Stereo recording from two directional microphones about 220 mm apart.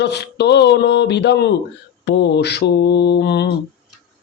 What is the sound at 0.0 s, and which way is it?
Speech, 50° left (ahead or behind).